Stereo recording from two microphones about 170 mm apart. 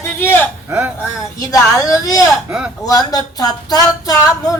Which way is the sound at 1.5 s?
20° left (ahead or behind).